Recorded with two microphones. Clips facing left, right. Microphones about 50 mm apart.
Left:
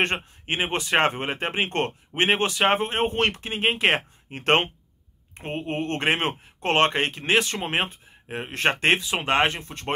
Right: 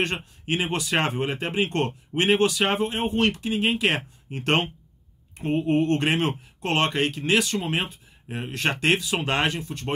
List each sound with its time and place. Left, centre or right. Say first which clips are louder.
0.0 s speech: left 2 dB; left